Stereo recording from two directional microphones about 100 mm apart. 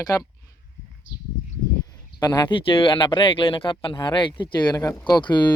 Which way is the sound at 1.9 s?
45° left (ahead or behind).